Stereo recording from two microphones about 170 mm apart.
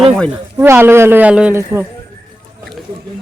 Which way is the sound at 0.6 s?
15° right (ahead or behind).